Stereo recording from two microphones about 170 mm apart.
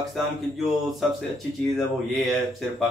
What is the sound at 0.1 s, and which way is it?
Speech, centre (ahead or behind).